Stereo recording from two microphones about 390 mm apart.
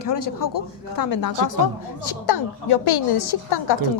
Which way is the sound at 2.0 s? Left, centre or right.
Left.